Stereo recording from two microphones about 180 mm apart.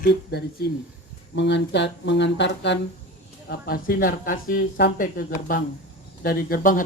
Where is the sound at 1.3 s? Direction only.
75° left (ahead or behind).